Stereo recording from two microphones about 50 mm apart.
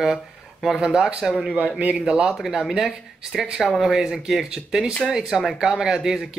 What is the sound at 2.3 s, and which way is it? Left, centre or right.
Speech, centre.